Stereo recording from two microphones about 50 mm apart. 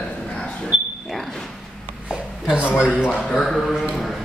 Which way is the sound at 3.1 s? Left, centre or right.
Centre.